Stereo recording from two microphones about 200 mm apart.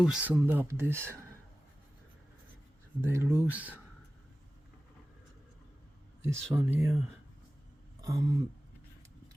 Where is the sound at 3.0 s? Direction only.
10° right (ahead or behind).